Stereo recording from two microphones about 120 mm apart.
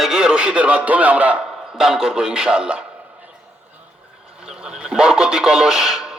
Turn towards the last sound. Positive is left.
turn(degrees=-5)  # may be behind; listen again after turning